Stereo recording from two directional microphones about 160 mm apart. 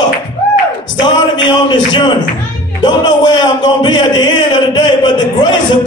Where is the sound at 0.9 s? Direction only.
30° left (ahead or behind).